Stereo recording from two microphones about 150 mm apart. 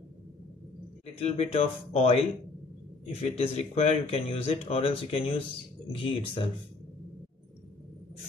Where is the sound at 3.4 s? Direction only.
40° left (ahead or behind).